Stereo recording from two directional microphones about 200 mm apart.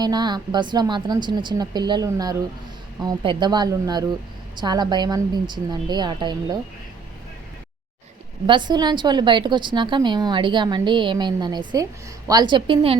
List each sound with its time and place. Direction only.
0.0 s a woman's voice: 20° right (ahead or behind)
8.4 s a woman's voice: 25° right (ahead or behind)